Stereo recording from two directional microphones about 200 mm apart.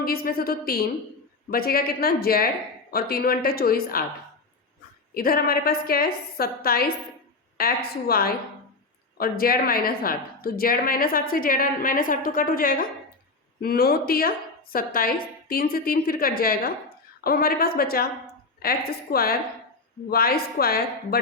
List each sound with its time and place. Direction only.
0.0 s a woman's voice: 50° left (ahead or behind)
5.1 s a woman's voice: 50° left (ahead or behind)